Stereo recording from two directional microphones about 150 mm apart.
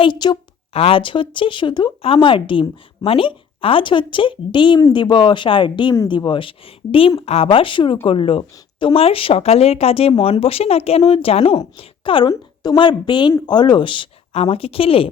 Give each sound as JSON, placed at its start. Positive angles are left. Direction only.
{"t": 0.0, "sound": "a woman's voice", "side_deg": 30}